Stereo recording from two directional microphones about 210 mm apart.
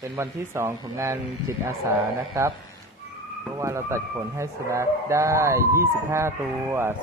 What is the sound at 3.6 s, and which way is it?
A man's voice, 15° right (ahead or behind).